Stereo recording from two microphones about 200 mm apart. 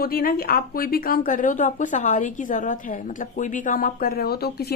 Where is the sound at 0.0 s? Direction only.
50° left (ahead or behind).